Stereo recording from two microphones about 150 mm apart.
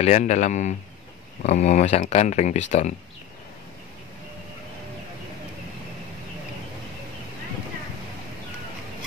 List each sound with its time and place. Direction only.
0.0 s speech: 50° left (ahead or behind)